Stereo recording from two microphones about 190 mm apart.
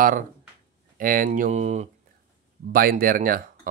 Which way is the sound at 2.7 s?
50° right (ahead or behind).